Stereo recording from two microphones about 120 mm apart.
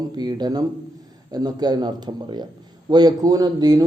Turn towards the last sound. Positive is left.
turn(degrees=-35)  # may be behind; listen again after turning